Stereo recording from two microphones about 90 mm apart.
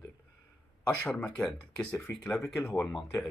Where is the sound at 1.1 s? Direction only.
15° left (ahead or behind).